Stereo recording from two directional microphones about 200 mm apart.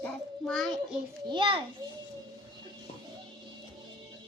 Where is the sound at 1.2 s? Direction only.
25° right (ahead or behind).